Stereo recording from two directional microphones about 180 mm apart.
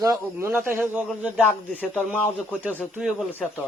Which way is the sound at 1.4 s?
10° left (ahead or behind).